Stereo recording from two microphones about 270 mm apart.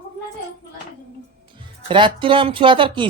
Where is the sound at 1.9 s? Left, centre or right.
Centre.